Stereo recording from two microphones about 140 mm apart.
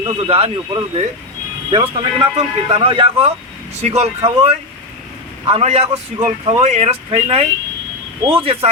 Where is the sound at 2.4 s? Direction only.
40° right (ahead or behind).